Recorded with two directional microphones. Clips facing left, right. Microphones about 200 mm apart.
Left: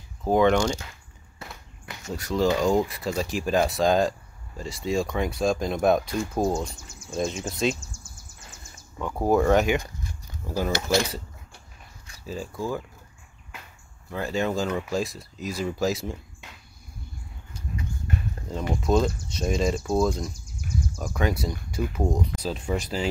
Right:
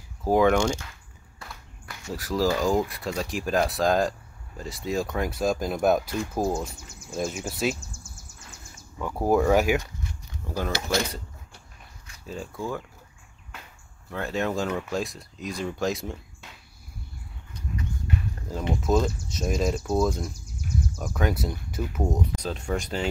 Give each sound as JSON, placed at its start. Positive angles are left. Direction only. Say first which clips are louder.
{"t": 0.2, "sound": "speech", "louder": "even", "side_deg": -5}
{"t": 1.4, "sound": "a sound", "louder": "left 2 dB", "side_deg": 20}
{"t": 2.1, "sound": "speech", "louder": "left 1 dB", "side_deg": 0}
{"t": 9.0, "sound": "speech", "louder": "left 1 dB", "side_deg": -5}
{"t": 10.4, "sound": "speech", "louder": "left 3 dB", "side_deg": 5}
{"t": 12.3, "sound": "speech", "louder": "left 2 dB", "side_deg": 0}
{"t": 14.1, "sound": "speech", "louder": "left 1 dB", "side_deg": 0}
{"t": 18.8, "sound": "speech", "louder": "left 2 dB", "side_deg": -5}